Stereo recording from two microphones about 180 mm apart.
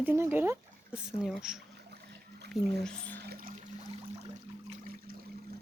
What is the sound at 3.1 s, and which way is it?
Trickle, 60° right (ahead or behind).